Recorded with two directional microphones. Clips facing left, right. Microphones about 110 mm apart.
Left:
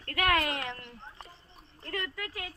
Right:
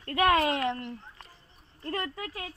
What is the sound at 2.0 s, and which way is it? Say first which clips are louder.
Speech: right 2 dB; 35° right (ahead or behind).